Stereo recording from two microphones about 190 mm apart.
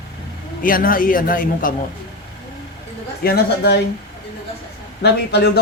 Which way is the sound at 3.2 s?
55° left (ahead or behind).